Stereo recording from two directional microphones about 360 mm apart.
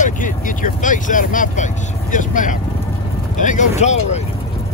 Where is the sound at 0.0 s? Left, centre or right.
Left.